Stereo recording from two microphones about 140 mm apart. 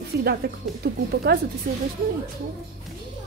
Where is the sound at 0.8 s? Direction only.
90° right.